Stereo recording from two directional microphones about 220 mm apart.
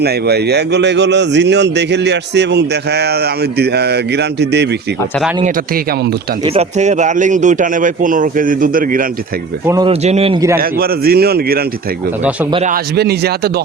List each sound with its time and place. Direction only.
0.0 s a man's voice: 45° right (ahead or behind)
6.4 s a man's voice: 30° right (ahead or behind)
9.6 s speech: 15° right (ahead or behind)
9.9 s speech: 30° right (ahead or behind)
10.6 s a man's voice: 45° right (ahead or behind)
12.6 s a man's voice: 45° right (ahead or behind)